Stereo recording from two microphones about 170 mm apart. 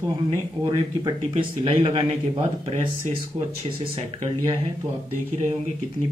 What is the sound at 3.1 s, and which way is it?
Speech, 35° right (ahead or behind).